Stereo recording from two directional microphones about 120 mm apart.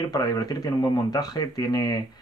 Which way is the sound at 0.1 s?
35° left (ahead or behind).